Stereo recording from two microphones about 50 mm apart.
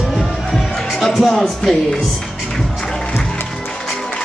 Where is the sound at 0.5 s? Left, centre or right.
Centre.